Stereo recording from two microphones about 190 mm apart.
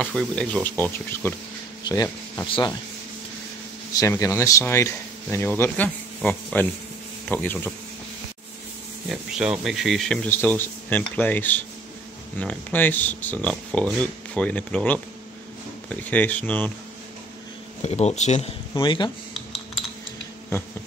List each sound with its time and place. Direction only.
0.0 s speech: 5° left (ahead or behind)
3.9 s speech: 15° left (ahead or behind)
9.1 s speech: 5° right (ahead or behind)
17.8 s speech: 35° left (ahead or behind)